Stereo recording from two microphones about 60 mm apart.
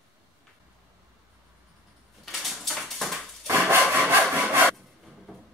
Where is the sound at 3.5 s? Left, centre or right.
Right.